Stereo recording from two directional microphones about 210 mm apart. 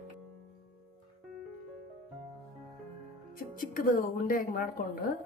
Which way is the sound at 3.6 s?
40° left (ahead or behind).